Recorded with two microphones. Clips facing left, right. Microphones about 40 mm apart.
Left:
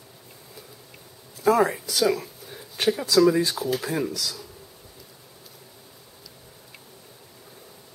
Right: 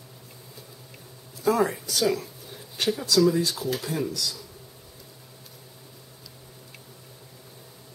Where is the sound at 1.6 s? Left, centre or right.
Centre.